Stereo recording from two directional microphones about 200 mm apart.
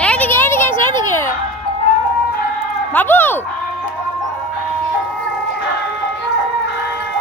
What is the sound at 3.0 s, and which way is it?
Speech, 10° left (ahead or behind).